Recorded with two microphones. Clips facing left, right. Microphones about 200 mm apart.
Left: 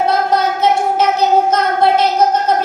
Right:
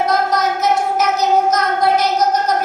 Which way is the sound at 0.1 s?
30° left (ahead or behind).